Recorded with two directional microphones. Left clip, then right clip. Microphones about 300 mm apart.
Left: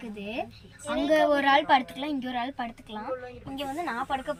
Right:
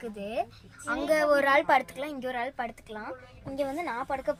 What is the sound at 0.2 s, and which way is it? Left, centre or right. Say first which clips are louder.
A woman's voice: right 2 dB; centre.